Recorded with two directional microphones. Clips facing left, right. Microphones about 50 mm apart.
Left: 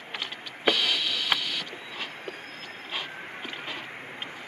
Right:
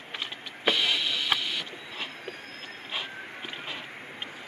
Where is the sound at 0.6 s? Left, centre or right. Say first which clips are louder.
Left 1 dB; right.